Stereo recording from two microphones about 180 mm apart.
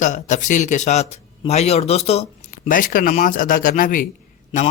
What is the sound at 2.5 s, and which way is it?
Speech, 50° left (ahead or behind).